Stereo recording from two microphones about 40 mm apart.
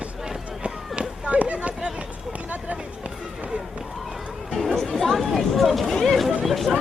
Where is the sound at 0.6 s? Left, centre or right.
Right.